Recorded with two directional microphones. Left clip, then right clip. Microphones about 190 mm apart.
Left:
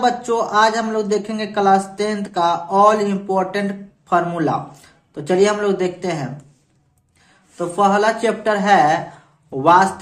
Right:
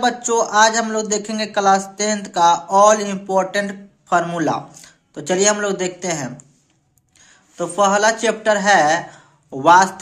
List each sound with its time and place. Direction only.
0.0 s speech: 25° right (ahead or behind)
7.5 s speech: 25° right (ahead or behind)